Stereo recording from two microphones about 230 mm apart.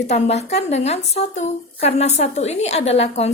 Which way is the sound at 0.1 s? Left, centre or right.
Left.